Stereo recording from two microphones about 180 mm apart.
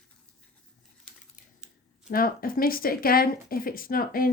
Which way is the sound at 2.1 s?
55° left (ahead or behind).